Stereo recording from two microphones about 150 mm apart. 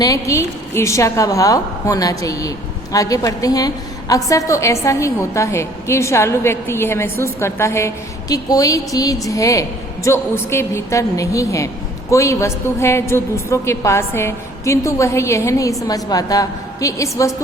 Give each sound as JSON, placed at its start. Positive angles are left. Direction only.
{"t": 0.0, "sound": "a woman's voice", "side_deg": 20}